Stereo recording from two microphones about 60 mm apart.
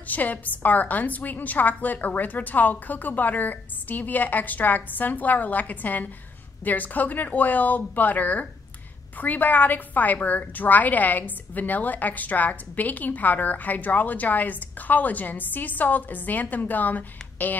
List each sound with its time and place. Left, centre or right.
0.1 s a woman's voice: left